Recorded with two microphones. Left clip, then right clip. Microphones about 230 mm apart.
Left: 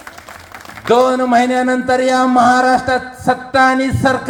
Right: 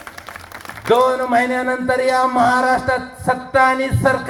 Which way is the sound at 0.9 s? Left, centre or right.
Left.